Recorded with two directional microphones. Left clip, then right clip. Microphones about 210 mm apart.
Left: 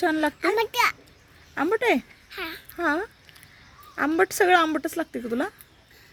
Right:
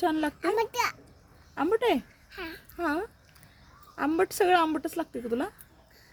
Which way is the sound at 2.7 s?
30° left (ahead or behind).